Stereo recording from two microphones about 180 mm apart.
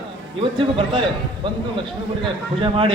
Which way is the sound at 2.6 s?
30° right (ahead or behind).